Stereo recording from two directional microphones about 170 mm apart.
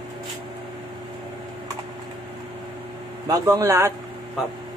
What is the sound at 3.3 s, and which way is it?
Speech, 20° right (ahead or behind).